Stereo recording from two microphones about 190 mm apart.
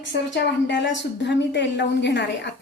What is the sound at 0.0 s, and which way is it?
A woman's voice, 65° left (ahead or behind).